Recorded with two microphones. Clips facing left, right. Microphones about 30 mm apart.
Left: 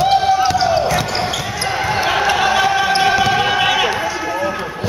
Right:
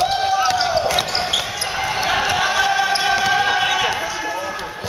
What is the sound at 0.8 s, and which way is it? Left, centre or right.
Basketball bounce, centre.